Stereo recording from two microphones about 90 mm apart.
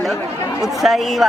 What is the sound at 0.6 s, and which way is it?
Speech, centre (ahead or behind).